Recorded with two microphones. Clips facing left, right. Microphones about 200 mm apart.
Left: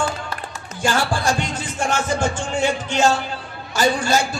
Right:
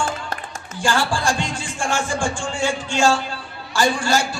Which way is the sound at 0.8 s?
20° left (ahead or behind).